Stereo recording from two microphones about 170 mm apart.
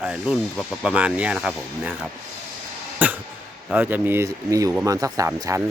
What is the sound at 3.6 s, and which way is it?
Speech, 10° right (ahead or behind).